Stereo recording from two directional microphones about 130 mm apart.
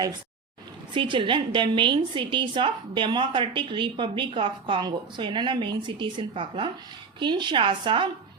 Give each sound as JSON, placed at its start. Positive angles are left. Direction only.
{"t": 0.9, "sound": "a woman's voice", "side_deg": -40}